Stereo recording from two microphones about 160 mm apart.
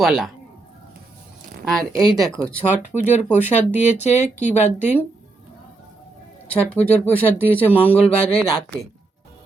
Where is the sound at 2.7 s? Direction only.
50° left (ahead or behind).